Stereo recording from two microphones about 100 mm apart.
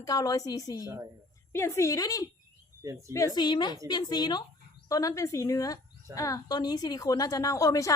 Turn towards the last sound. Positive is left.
turn(degrees=35)  # may be behind; listen again after turning